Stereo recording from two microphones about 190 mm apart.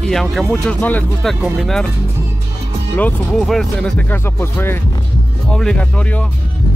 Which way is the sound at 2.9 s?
5° left (ahead or behind).